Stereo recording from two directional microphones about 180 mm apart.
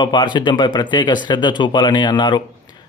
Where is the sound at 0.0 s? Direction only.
25° left (ahead or behind).